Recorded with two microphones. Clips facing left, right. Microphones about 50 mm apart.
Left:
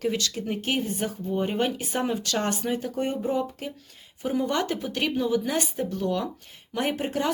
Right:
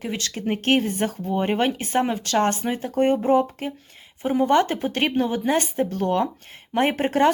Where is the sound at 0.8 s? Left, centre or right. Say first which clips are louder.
Right 4 dB; right.